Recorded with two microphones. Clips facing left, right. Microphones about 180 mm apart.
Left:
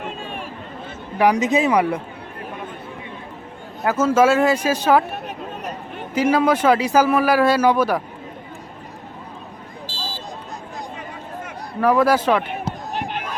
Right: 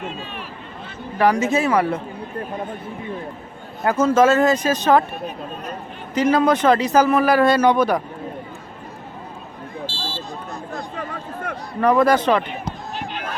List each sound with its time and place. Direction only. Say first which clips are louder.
1.2 s speech: left 1 dB; 15° left (ahead or behind)
3.8 s speech: right 1 dB; 5° left (ahead or behind)
6.1 s speech: right 1 dB; 10° left (ahead or behind)
10.9 s a sound: right 3 dB; 60° right (ahead or behind)
11.8 s speech: right 1 dB; 5° left (ahead or behind)
12.9 s fireworks: left 3 dB; 60° left (ahead or behind)